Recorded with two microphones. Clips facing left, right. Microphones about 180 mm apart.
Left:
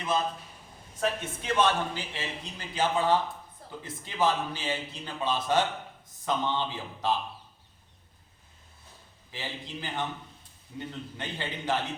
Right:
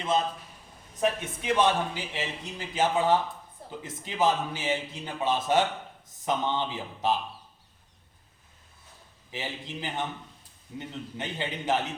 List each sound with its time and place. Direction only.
0.9 s a man's voice: 15° right (ahead or behind)
9.3 s a man's voice: 20° right (ahead or behind)